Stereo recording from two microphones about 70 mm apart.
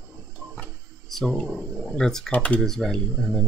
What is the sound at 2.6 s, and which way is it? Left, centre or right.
Speech, centre.